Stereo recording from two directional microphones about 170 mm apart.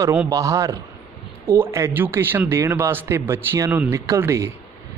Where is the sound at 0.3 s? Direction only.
20° right (ahead or behind).